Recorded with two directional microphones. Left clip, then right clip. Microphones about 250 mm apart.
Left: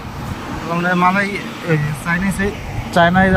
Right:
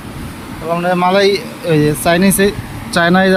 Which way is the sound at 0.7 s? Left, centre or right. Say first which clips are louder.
Right 3 dB; right.